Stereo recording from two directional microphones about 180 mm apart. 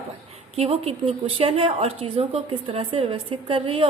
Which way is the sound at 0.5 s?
35° right (ahead or behind).